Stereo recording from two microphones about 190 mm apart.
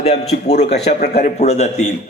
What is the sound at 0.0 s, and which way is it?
A man's voice, 35° left (ahead or behind).